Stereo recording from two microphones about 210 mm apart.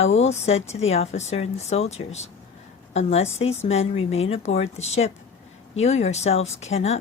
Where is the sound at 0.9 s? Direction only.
30° left (ahead or behind).